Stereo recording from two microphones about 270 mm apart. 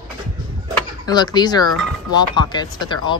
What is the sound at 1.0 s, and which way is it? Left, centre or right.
Speech, centre.